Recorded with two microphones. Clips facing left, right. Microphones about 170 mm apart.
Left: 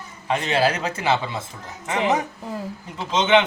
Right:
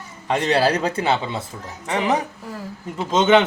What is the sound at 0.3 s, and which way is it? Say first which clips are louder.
Speech: right 2 dB; 35° right (ahead or behind).